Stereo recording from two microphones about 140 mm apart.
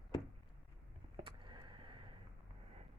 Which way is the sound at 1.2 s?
35° right (ahead or behind).